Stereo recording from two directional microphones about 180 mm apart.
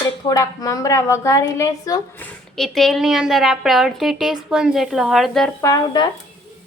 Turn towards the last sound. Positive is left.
turn(degrees=20)  # may be behind; listen again after turning